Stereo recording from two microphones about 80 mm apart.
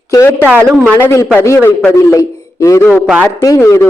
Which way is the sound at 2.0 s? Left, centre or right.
Left.